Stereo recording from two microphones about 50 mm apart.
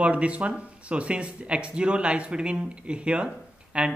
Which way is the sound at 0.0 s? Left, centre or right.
Right.